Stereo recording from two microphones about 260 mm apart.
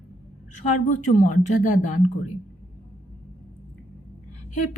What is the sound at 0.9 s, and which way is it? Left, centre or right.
Speech, left.